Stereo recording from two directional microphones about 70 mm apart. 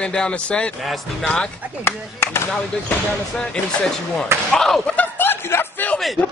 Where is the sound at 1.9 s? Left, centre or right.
Left.